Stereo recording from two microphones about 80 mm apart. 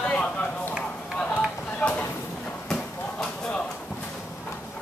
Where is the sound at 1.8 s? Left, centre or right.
Centre.